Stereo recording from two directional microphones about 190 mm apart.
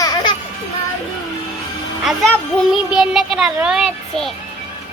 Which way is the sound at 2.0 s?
Centre (ahead or behind).